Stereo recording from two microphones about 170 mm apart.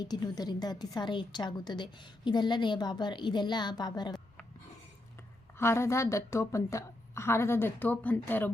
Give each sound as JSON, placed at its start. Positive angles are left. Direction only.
{"t": 0.0, "sound": "a woman's voice", "side_deg": 25}
{"t": 5.5, "sound": "a woman's voice", "side_deg": 15}